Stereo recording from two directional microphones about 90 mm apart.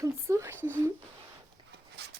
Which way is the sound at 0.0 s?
30° right (ahead or behind).